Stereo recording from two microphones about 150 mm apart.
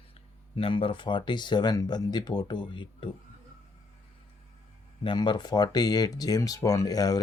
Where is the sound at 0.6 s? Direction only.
35° left (ahead or behind).